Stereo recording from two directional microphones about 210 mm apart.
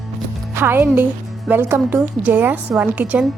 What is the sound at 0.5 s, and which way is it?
A woman's voice, 10° right (ahead or behind).